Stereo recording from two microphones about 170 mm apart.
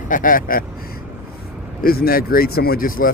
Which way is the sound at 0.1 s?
55° left (ahead or behind).